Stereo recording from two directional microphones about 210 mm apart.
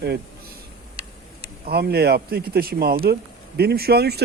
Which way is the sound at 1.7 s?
50° right (ahead or behind).